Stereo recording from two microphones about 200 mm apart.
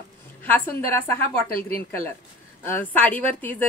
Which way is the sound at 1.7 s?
10° left (ahead or behind).